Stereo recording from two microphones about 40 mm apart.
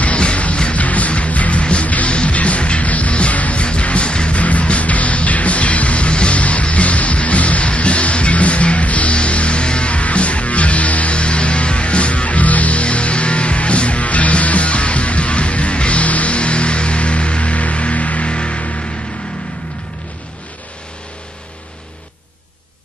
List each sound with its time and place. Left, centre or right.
0.0 s music: left
4.4 s music: left